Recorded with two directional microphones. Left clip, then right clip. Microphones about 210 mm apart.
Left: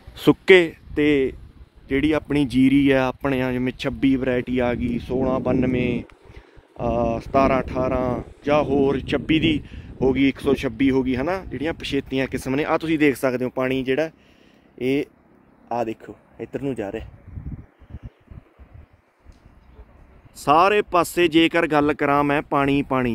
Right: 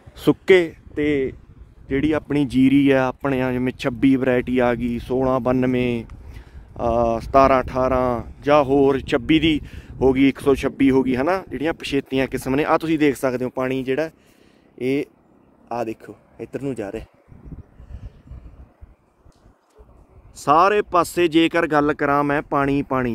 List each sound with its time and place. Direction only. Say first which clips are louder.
0.1 s speech: left 1 dB; 10° left (ahead or behind)
0.9 s speech: left 2 dB; 20° left (ahead or behind)
1.9 s speech: even; centre (ahead or behind)
20.4 s speech: right 1 dB; centre (ahead or behind)